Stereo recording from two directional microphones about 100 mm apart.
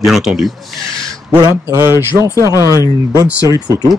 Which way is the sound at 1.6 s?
25° right (ahead or behind).